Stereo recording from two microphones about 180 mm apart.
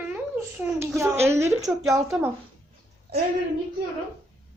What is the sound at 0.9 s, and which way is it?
A woman's voice, 15° right (ahead or behind).